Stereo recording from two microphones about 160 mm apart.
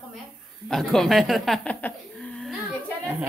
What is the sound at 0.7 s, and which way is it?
Speech, centre (ahead or behind).